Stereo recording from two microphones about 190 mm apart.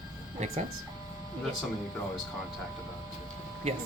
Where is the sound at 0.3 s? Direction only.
35° right (ahead or behind).